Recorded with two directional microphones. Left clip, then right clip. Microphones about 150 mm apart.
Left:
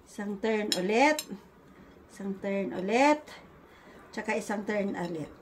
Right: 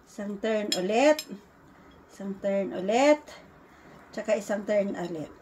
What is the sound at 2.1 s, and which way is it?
Speech, 30° left (ahead or behind).